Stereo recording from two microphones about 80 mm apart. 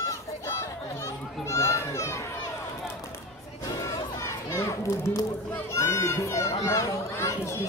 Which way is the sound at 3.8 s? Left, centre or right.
Left.